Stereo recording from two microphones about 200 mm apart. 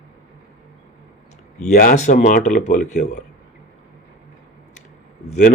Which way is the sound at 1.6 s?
40° left (ahead or behind).